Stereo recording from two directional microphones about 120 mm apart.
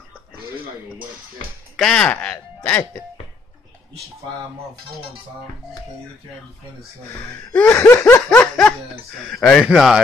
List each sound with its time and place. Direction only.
1.8 s speech: 5° left (ahead or behind)
7.5 s laughter: 15° left (ahead or behind)
9.2 s speech: 5° left (ahead or behind)